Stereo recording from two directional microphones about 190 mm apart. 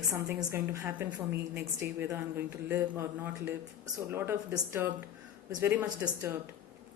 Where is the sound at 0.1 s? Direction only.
15° right (ahead or behind).